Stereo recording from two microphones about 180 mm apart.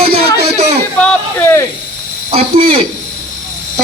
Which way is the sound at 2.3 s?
30° right (ahead or behind).